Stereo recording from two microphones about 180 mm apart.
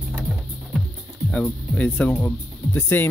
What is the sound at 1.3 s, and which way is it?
Speech, 5° left (ahead or behind).